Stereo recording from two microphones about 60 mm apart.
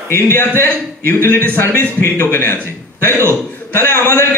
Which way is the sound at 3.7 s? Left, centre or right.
Left.